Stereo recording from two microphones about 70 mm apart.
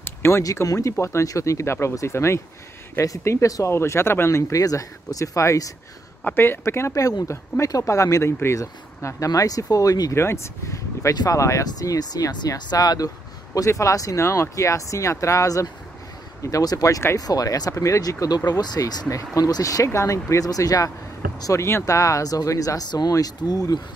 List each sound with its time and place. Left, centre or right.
0.0 s a sound: left
0.7 s speech: left
3.7 s speech: left
4.6 s speech: left
6.2 s speech: left
6.9 s speech: left
8.5 s speech: left
10.1 s speech: left
11.6 s speech: left
13.7 s speech: left
21.5 s speech: left